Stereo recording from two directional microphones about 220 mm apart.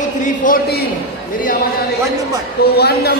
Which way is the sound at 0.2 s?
35° left (ahead or behind).